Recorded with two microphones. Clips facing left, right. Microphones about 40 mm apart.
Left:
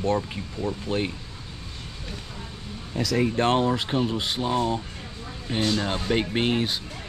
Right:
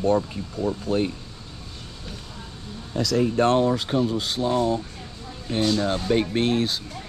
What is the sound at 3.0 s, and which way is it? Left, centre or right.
Speech, left.